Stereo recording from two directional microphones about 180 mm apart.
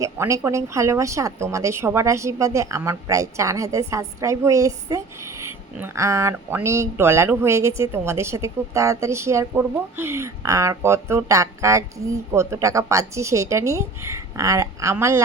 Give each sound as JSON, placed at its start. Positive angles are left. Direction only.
{"t": 0.0, "sound": "a woman's voice", "side_deg": -15}